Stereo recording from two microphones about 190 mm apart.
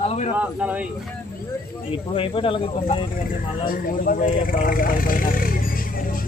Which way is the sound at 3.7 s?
50° left (ahead or behind).